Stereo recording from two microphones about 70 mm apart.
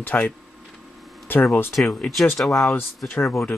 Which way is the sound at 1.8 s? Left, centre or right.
Centre.